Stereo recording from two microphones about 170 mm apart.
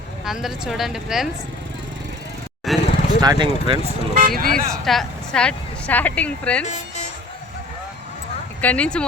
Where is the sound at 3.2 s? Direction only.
25° right (ahead or behind).